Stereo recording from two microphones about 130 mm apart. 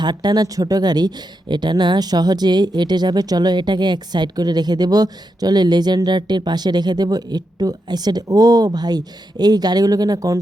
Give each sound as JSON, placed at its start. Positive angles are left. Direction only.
{"t": 0.0, "sound": "speech", "side_deg": -35}